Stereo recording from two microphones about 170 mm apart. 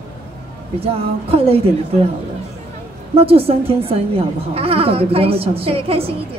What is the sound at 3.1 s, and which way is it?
A woman's voice, 35° right (ahead or behind).